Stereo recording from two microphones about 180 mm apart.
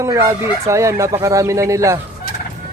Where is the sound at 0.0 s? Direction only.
15° right (ahead or behind).